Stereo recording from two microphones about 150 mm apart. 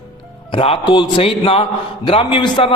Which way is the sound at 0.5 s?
35° left (ahead or behind).